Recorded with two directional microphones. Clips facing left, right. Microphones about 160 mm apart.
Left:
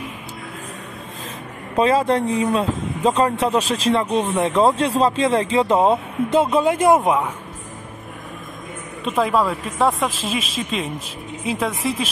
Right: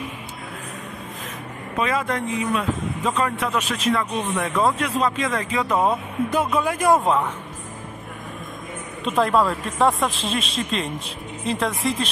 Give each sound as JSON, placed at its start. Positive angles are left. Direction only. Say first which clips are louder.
{"t": 1.8, "sound": "speech", "louder": "left 7 dB", "side_deg": 30}
{"t": 9.0, "sound": "speech", "louder": "even", "side_deg": 0}